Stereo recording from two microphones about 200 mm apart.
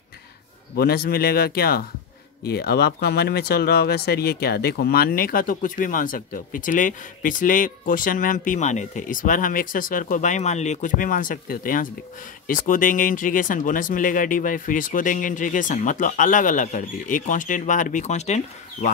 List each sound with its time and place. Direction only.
0.7 s speech: 50° left (ahead or behind); by 18.9 s 35° left (ahead or behind)